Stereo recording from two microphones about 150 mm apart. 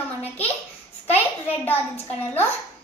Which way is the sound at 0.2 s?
10° left (ahead or behind).